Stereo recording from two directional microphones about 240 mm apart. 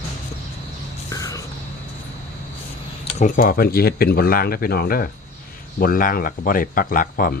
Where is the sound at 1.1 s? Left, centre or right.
Centre.